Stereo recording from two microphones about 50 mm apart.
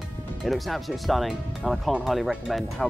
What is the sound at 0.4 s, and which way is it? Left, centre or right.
Speech, centre.